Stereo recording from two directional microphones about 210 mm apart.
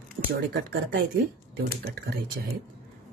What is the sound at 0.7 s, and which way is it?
Speech, 50° right (ahead or behind).